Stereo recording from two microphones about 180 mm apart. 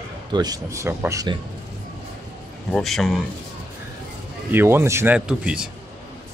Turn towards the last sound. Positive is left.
turn(degrees=-5)  # may be behind; listen again after turning